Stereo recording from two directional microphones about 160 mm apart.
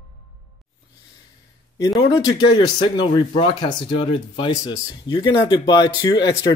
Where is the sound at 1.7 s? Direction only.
25° left (ahead or behind).